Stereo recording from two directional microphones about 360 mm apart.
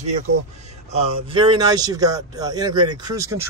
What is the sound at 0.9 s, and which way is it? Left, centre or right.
Speech, centre.